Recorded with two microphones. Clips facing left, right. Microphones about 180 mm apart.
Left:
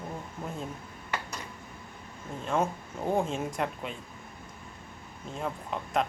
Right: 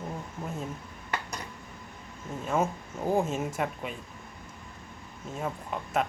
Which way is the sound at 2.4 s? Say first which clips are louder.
Right 1 dB; 5° right (ahead or behind).